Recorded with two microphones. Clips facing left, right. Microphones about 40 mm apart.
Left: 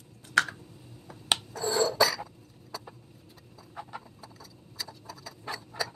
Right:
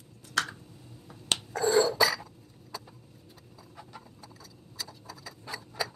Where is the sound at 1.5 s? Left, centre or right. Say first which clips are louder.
Right 5 dB; right.